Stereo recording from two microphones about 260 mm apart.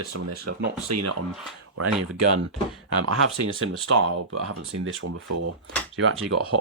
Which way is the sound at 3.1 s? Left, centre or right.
Right.